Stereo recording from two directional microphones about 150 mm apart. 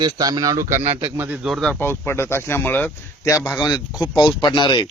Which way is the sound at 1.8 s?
15° left (ahead or behind).